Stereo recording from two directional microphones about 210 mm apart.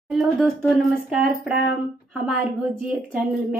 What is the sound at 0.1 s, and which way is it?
A woman's voice, centre (ahead or behind).